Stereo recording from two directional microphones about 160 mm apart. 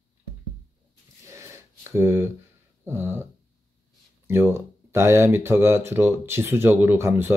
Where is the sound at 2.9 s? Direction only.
15° right (ahead or behind).